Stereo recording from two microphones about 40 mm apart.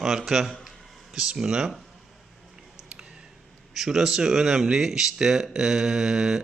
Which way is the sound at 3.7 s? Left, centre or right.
Centre.